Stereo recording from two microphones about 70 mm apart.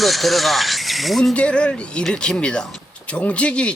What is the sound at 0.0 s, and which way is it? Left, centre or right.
Speech, centre.